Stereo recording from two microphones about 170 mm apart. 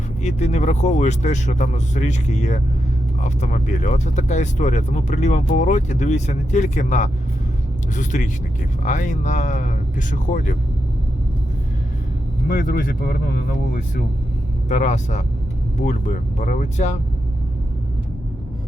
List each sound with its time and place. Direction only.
0.2 s speech: 45° left (ahead or behind)
12.5 s speech: 55° left (ahead or behind)
14.7 s speech: 45° left (ahead or behind)